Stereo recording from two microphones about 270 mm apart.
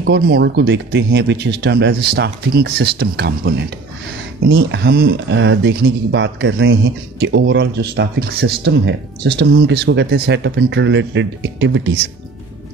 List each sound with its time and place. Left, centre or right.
0.0 s speech: right